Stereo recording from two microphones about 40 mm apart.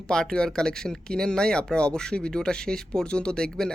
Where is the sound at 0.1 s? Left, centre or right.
Centre.